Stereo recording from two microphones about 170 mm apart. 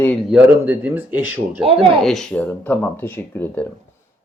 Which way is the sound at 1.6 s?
35° right (ahead or behind).